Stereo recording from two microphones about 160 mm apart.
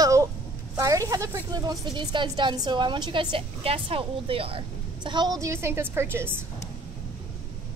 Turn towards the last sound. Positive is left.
turn(degrees=-15)  # may be behind; listen again after turning